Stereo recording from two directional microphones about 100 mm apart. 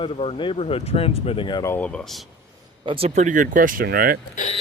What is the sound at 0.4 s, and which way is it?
Speech, 70° left (ahead or behind).